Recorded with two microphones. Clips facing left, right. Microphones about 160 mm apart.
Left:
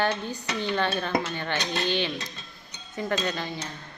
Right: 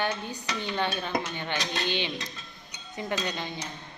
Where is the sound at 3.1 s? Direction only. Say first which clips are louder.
Left 3 dB; 15° right (ahead or behind).